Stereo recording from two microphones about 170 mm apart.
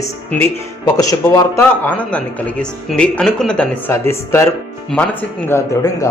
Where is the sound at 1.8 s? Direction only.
10° left (ahead or behind).